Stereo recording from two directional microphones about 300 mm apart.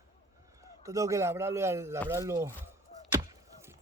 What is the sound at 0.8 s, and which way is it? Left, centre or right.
Speech, centre.